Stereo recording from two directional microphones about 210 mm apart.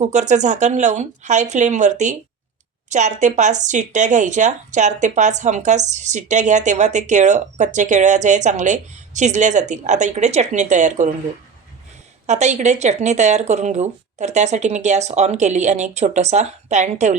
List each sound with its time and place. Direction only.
0.0 s speech: 35° right (ahead or behind)
12.2 s speech: 35° right (ahead or behind)